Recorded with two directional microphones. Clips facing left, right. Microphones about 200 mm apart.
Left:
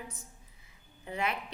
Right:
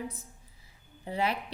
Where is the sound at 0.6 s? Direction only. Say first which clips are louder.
Right 4 dB; 30° right (ahead or behind).